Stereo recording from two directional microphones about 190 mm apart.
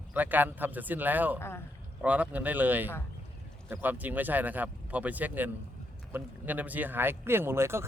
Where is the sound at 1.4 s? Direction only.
10° left (ahead or behind).